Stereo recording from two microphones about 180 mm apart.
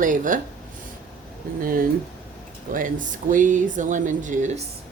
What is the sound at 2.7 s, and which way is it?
Speech, 50° right (ahead or behind).